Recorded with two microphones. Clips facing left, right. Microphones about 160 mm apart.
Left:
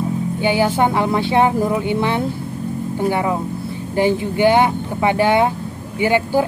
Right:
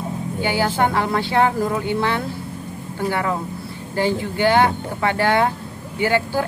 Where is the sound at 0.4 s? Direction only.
20° left (ahead or behind).